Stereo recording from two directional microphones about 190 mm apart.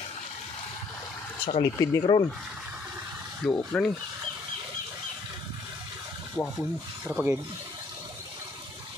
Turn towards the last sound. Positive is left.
turn(degrees=-5)  # may be behind; listen again after turning